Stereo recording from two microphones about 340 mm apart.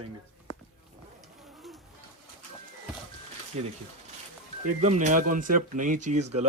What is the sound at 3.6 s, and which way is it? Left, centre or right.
Speech, centre.